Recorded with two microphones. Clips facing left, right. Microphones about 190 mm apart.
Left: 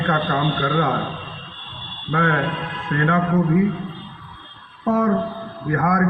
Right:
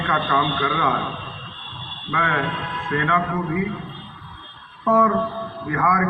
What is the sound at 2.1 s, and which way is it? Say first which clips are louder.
A man's voice: left 4 dB; 45° left (ahead or behind).